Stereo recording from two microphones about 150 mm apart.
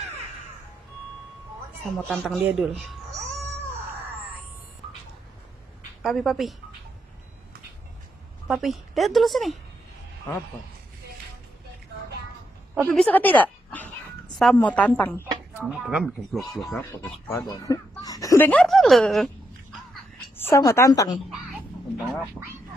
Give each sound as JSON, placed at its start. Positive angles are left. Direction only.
{"t": 2.0, "sound": "a woman's voice", "side_deg": 5}
{"t": 6.0, "sound": "a woman's voice", "side_deg": 0}
{"t": 8.5, "sound": "a woman's voice", "side_deg": 0}
{"t": 12.8, "sound": "a woman's voice", "side_deg": 5}
{"t": 15.8, "sound": "a woman's voice", "side_deg": 0}
{"t": 16.7, "sound": "a woman's voice", "side_deg": 10}
{"t": 17.5, "sound": "speech", "side_deg": 25}
{"t": 18.5, "sound": "a woman's voice", "side_deg": 5}
{"t": 20.3, "sound": "a woman's voice", "side_deg": 15}
{"t": 22.4, "sound": "a woman's voice", "side_deg": 10}